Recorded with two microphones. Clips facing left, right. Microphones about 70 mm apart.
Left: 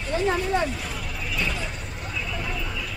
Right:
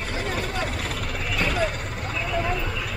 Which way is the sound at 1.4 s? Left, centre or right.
Right.